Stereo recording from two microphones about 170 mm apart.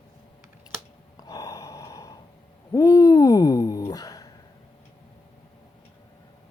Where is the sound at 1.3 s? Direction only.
20° left (ahead or behind).